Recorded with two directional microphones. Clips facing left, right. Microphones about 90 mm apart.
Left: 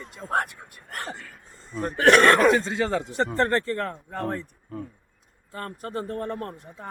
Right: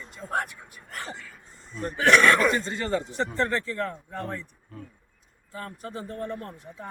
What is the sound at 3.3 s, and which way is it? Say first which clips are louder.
Speech: left 5 dB; 50° left (ahead or behind).